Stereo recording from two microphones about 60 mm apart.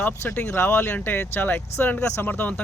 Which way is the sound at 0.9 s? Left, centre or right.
Left.